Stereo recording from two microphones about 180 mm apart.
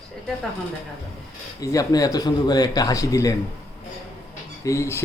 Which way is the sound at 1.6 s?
20° left (ahead or behind).